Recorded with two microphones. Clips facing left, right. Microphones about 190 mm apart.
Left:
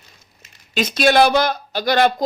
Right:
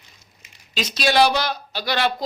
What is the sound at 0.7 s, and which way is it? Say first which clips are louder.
Speech: left 5 dB; 55° left (ahead or behind).